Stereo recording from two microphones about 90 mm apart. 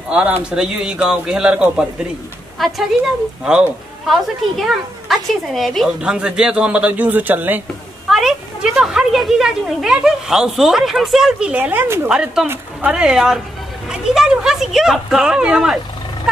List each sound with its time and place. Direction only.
0.1 s a man's voice: 10° right (ahead or behind)
6.1 s a man's voice: 10° right (ahead or behind)
8.1 s a man's voice: 5° right (ahead or behind)